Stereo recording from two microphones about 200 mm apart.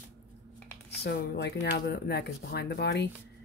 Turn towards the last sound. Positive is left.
turn(degrees=55)  # may be behind; listen again after turning